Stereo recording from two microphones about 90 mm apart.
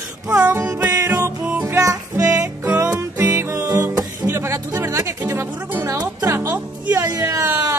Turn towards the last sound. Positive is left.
turn(degrees=-40)  # may be behind; listen again after turning